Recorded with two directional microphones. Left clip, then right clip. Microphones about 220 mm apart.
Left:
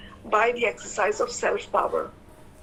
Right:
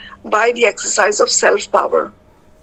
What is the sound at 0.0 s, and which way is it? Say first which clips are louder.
Speech: right 8 dB; 45° right (ahead or behind).